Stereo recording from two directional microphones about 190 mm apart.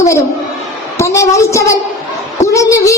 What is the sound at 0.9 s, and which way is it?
Speech, 15° left (ahead or behind).